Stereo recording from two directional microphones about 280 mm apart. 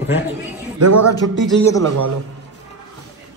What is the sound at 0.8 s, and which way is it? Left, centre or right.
Speech, right.